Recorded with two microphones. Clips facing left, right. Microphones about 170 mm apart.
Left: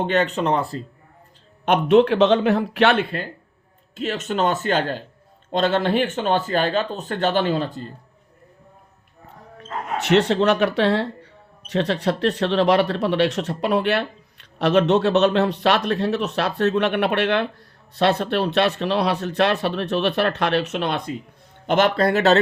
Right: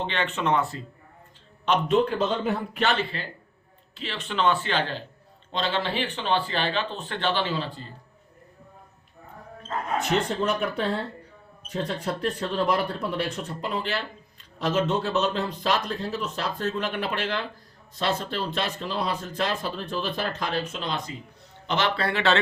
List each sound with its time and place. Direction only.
0.0 s speech: 45° left (ahead or behind)
1.6 s speech: 60° left (ahead or behind)
10.0 s speech: 75° left (ahead or behind)
21.7 s speech: 50° left (ahead or behind)